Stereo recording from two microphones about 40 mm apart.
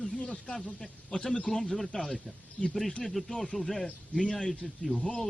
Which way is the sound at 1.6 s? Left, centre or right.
Centre.